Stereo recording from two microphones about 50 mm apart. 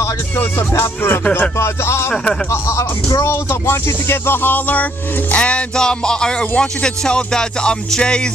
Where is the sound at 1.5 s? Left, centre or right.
Left.